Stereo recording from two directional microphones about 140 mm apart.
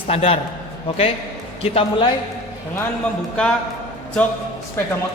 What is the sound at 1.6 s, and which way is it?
Speech, 40° left (ahead or behind).